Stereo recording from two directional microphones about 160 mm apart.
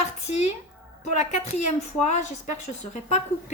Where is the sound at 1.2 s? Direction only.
45° left (ahead or behind).